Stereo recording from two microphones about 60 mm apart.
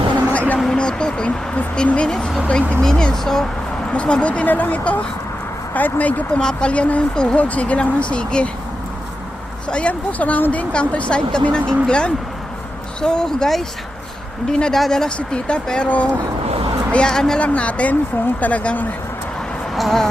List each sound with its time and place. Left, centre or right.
0.3 s a sound: left
0.7 s speech: centre
2.8 s speech: centre
9.6 s speech: centre
16.9 s speech: centre
17.4 s speech: left
19.7 s speech: centre